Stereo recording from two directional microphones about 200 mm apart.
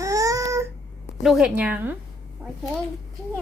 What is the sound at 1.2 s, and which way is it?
Speech, 5° right (ahead or behind).